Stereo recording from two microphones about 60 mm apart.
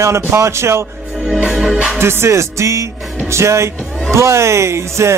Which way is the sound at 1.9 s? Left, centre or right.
Right.